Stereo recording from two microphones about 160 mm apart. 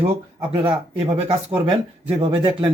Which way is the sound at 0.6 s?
40° right (ahead or behind).